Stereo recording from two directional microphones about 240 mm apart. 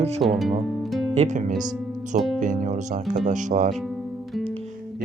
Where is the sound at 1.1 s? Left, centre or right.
Right.